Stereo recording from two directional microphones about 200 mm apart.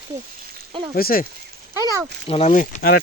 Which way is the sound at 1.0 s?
50° left (ahead or behind).